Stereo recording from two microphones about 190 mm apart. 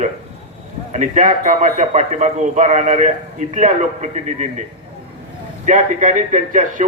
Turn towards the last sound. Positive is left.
turn(degrees=-40)  # may be behind; listen again after turning